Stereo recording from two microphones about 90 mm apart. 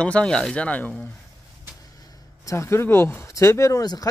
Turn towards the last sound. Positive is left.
turn(degrees=35)  # may be behind; listen again after turning